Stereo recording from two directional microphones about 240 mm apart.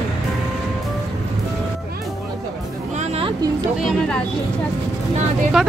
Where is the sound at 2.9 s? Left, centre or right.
Right.